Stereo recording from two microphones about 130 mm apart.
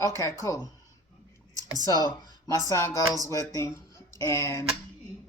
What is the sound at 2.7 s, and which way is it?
Speech, 20° left (ahead or behind).